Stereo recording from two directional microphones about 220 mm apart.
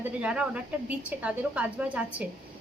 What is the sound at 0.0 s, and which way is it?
A woman's voice, 5° right (ahead or behind).